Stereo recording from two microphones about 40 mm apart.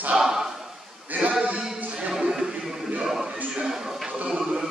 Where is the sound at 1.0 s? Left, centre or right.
Right.